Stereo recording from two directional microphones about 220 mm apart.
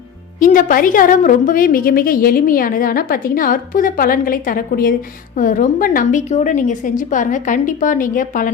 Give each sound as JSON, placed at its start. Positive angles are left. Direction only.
{"t": 0.3, "sound": "a woman's voice", "side_deg": 35}